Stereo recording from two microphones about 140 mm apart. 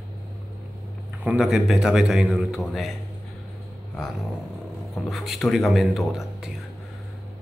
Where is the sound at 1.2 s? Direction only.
5° right (ahead or behind).